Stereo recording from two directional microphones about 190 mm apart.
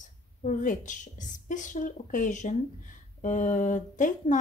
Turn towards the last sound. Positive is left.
turn(degrees=40)  # may be behind; listen again after turning